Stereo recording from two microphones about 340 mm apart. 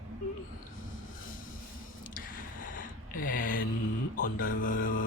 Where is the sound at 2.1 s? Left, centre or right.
Left.